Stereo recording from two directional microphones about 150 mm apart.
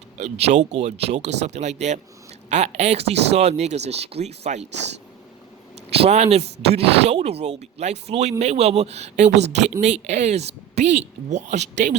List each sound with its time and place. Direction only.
0.2 s speech: 45° right (ahead or behind)
5.9 s speech: 45° right (ahead or behind)